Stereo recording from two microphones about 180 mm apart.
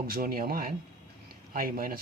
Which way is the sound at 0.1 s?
55° right (ahead or behind).